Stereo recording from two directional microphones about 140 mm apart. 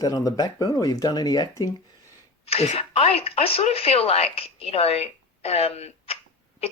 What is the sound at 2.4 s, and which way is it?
Speech, 50° left (ahead or behind).